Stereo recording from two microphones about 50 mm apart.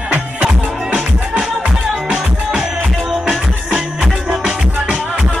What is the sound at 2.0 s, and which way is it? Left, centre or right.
Music, centre.